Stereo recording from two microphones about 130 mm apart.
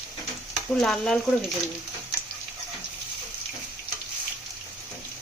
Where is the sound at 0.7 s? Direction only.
5° left (ahead or behind).